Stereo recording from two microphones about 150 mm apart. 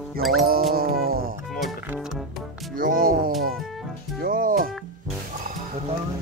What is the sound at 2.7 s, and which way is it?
Music, 70° right (ahead or behind).